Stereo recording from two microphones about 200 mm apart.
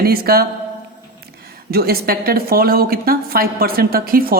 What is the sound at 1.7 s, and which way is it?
A woman's voice, 50° right (ahead or behind).